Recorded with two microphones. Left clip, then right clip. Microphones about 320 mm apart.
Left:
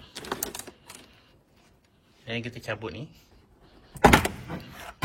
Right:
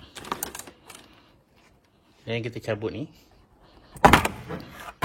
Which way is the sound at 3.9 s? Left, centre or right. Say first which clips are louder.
Right 2 dB; centre.